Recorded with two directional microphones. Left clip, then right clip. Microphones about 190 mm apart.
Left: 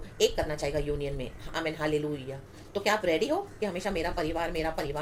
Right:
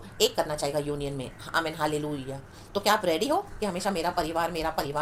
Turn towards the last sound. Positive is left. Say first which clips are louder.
# right 2 dB
turn(degrees=-20)  # may be behind; listen again after turning